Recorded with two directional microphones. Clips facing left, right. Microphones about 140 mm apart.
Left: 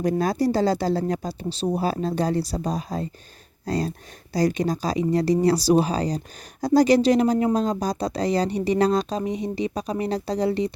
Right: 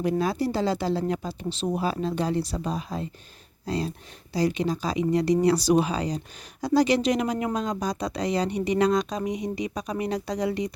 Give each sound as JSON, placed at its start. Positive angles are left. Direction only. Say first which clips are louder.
{"t": 0.0, "sound": "speech", "louder": "left 3 dB", "side_deg": 40}